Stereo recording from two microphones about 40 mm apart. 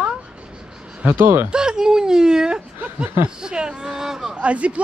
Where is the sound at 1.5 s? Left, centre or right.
Centre.